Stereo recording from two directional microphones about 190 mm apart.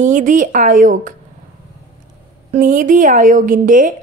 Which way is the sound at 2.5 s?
45° right (ahead or behind).